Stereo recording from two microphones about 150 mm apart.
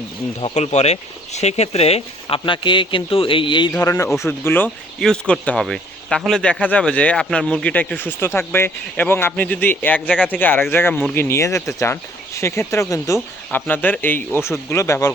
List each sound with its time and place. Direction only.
0.3 s speech: 45° left (ahead or behind)
2.4 s a man's voice: 30° left (ahead or behind)
3.8 s a man's voice: 20° left (ahead or behind)